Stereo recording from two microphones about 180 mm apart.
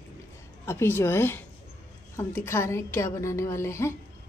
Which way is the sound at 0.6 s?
15° left (ahead or behind).